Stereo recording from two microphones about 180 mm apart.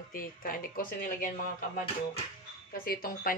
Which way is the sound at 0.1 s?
50° left (ahead or behind).